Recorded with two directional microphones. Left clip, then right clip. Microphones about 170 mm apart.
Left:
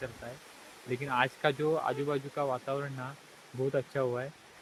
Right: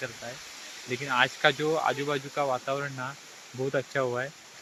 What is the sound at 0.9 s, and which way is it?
Speech, centre (ahead or behind).